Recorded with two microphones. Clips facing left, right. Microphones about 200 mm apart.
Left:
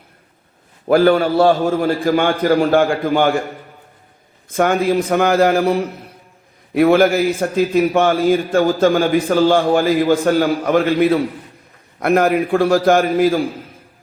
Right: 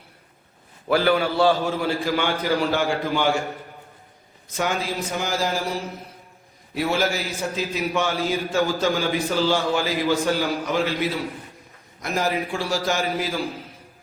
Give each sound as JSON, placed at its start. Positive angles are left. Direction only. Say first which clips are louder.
{"t": 0.9, "sound": "a man's voice", "louder": "left 7 dB", "side_deg": 50}
{"t": 4.4, "sound": "a man's voice", "louder": "left 10 dB", "side_deg": 55}